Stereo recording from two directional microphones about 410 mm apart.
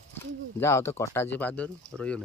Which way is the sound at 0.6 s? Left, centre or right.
Centre.